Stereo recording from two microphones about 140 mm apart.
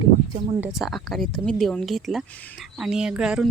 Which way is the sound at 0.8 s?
Centre (ahead or behind).